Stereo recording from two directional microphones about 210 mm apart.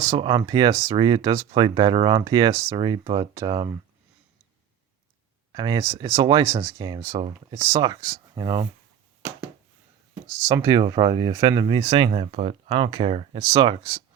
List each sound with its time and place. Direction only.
0.0 s speech: 20° right (ahead or behind)
5.5 s speech: 20° right (ahead or behind)
10.4 s speech: 15° right (ahead or behind)